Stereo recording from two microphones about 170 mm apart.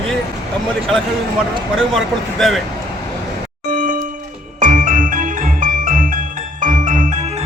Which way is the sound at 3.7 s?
50° right (ahead or behind).